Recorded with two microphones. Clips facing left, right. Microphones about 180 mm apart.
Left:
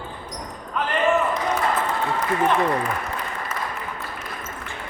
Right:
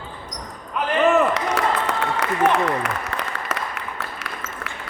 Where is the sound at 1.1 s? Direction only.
80° right.